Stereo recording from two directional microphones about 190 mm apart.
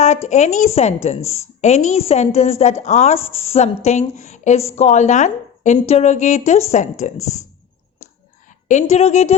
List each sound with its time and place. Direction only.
0.0 s a woman's voice: 35° left (ahead or behind)
8.4 s a woman's voice: 40° left (ahead or behind)